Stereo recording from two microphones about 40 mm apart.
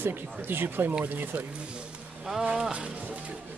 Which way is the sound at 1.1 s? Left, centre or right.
Right.